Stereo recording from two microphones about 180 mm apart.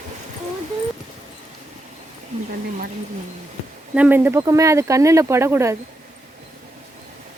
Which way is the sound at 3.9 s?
10° right (ahead or behind).